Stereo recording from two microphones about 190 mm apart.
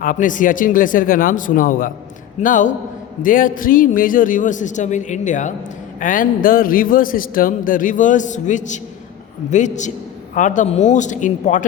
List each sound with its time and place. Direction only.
0.0 s a man's voice: 45° left (ahead or behind)